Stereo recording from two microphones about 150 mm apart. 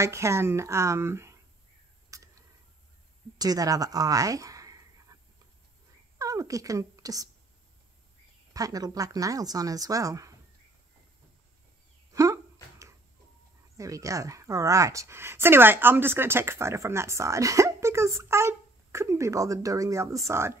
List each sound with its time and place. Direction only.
0.0 s a woman's voice: 20° right (ahead or behind)
2.1 s a sound: 20° right (ahead or behind)
3.3 s speech: 25° right (ahead or behind)
6.1 s speech: 20° right (ahead or behind)
8.5 s a woman's voice: 25° right (ahead or behind)
12.1 s dog: 20° right (ahead or behind)
13.7 s a woman's voice: 20° right (ahead or behind)